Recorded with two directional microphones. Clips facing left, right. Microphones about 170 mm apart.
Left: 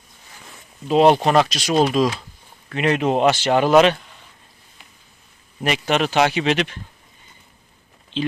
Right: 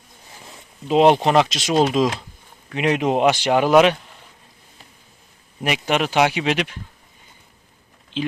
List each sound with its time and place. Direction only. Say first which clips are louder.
0.3 s speech: right 1 dB; 25° right (ahead or behind)
5.6 s speech: left 1 dB; 10° right (ahead or behind)
8.1 s speech: left 1 dB; 10° right (ahead or behind)